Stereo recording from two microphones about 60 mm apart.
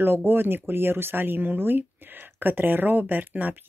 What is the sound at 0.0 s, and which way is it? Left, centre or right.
Speech, right.